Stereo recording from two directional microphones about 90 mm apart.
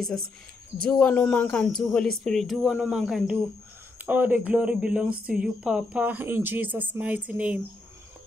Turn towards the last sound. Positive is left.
turn(degrees=-15)  # may be behind; listen again after turning